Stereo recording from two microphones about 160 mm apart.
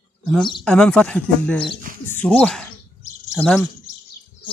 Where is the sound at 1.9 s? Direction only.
60° right (ahead or behind).